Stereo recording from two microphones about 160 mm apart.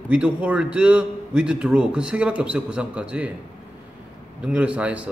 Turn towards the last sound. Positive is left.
turn(degrees=-5)  # may be behind; listen again after turning